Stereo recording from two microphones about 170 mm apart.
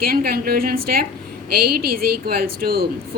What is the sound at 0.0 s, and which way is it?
A woman's voice, 65° right (ahead or behind).